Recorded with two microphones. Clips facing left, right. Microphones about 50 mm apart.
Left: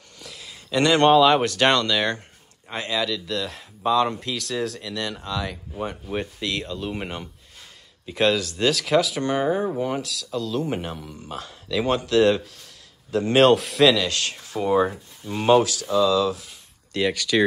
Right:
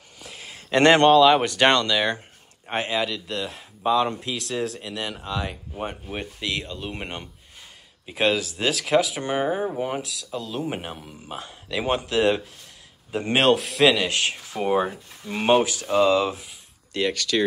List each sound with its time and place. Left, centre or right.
0.3 s a sound: right
1.0 s speech: centre
1.4 s speech: centre
2.9 s speech: centre
3.3 s speech: centre
6.0 s speech: centre
14.1 s speech: centre
15.9 s speech: right
16.9 s speech: centre